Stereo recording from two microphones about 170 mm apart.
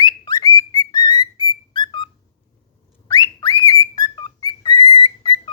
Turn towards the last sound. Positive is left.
turn(degrees=30)  # may be behind; listen again after turning